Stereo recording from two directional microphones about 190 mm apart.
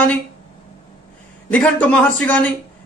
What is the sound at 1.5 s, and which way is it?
Speech, 5° left (ahead or behind).